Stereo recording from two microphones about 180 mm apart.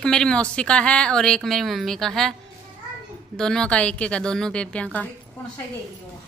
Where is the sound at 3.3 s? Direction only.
5° left (ahead or behind).